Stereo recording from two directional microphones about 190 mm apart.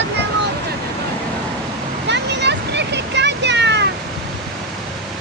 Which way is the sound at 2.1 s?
65° right (ahead or behind).